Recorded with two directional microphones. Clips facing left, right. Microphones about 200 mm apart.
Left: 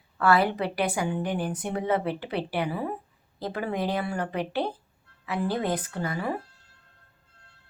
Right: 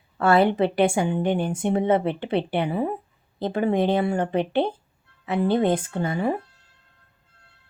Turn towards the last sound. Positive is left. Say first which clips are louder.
# right 6 dB
turn(degrees=-25)  # may be behind; listen again after turning